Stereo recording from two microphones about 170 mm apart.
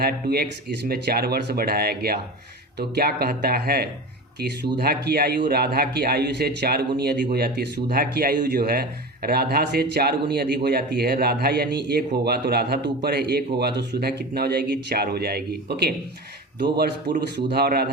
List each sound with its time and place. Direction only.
0.0 s a man's voice: 65° right (ahead or behind)
17.3 s a man's voice: 70° right (ahead or behind)